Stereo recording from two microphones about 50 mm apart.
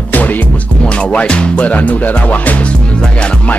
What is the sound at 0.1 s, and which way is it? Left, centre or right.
Music, left.